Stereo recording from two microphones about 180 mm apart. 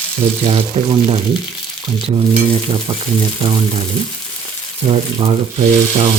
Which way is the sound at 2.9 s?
25° right (ahead or behind).